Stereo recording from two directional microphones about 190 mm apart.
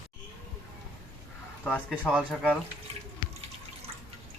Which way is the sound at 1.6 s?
5° left (ahead or behind).